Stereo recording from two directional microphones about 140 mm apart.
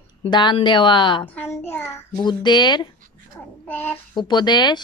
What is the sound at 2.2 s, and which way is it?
Speech, 30° left (ahead or behind).